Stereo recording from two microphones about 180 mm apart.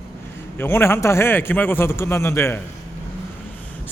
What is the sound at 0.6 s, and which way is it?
A man's voice, 15° left (ahead or behind).